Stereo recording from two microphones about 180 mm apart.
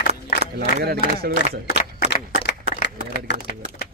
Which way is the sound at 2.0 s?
70° left (ahead or behind).